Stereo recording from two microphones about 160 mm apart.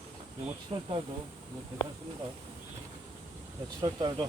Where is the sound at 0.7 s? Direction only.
35° right (ahead or behind).